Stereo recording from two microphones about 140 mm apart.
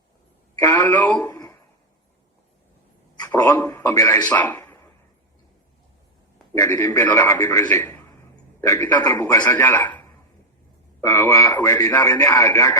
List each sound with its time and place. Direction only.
0.7 s speech: 15° left (ahead or behind)
3.2 s a man's voice: 20° left (ahead or behind)
6.5 s a man's voice: 25° left (ahead or behind)
7.7 s a sound: 15° left (ahead or behind)
8.6 s a man's voice: 20° left (ahead or behind)
11.0 s a man's voice: 15° left (ahead or behind)